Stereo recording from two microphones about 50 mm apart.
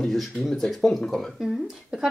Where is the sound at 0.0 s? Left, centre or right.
Centre.